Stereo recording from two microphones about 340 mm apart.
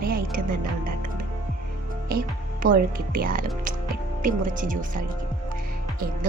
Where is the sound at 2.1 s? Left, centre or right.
Right.